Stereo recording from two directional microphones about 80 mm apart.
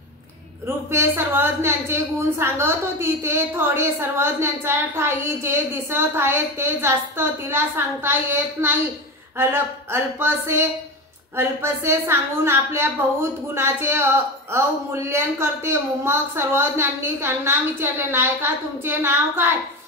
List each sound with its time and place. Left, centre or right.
0.7 s a woman's voice: right